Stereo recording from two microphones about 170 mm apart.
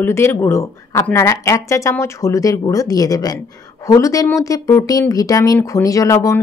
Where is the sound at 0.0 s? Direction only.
15° left (ahead or behind).